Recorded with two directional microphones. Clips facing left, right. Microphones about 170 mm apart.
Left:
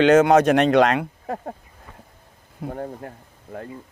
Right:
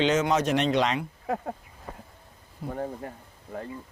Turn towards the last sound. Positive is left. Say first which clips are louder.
# left 2 dB
turn(degrees=45)  # may be behind; listen again after turning